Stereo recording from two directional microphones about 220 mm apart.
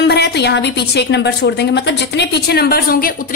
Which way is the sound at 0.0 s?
50° left (ahead or behind).